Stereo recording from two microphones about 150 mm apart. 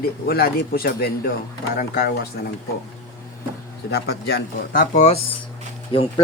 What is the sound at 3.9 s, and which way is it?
Speech, 90° left.